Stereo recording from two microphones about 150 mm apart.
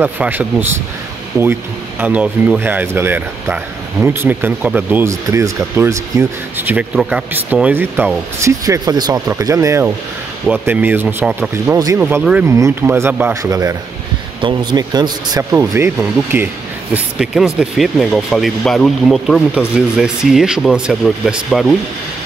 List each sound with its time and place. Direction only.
0.0 s speech: 10° right (ahead or behind)
8.6 s speech: 25° right (ahead or behind)
16.9 s speech: 5° right (ahead or behind)